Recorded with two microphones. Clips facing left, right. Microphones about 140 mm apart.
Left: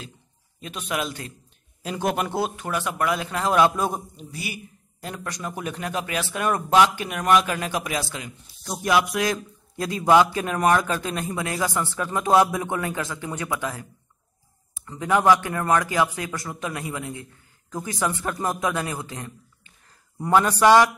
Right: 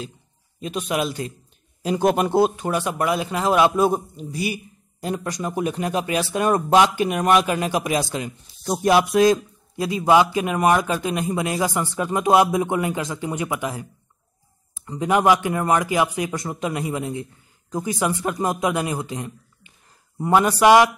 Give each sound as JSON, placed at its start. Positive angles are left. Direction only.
{"t": 0.7, "sound": "speech", "side_deg": -20}
{"t": 2.0, "sound": "speech", "side_deg": -30}
{"t": 5.0, "sound": "speech", "side_deg": -30}
{"t": 5.3, "sound": "speech", "side_deg": -15}
{"t": 9.8, "sound": "speech", "side_deg": -10}
{"t": 14.9, "sound": "speech", "side_deg": -20}